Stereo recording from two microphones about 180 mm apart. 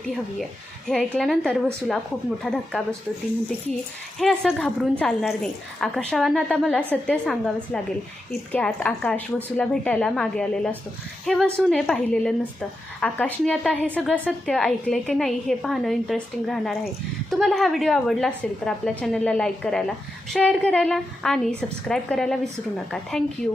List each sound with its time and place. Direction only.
0.9 s a woman's voice: 5° left (ahead or behind)
4.2 s a woman's voice: 5° left (ahead or behind)